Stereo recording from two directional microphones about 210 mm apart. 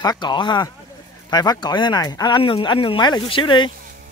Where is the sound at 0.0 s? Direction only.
20° left (ahead or behind).